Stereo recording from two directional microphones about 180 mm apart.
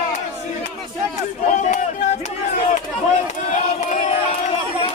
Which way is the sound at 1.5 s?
40° left (ahead or behind).